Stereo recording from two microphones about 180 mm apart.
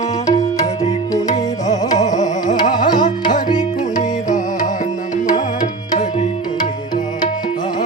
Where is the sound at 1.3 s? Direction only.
40° left (ahead or behind).